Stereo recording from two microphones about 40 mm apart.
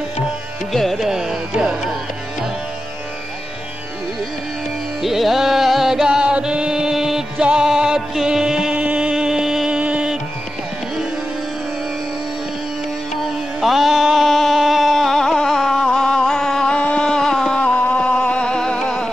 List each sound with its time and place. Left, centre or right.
0.9 s carnatic music: centre
5.0 s music: centre
6.2 s music: right
8.7 s music: right
9.1 s music: centre
9.7 s music: right
13.1 s music: centre
17.0 s a sound: centre
17.8 s music: left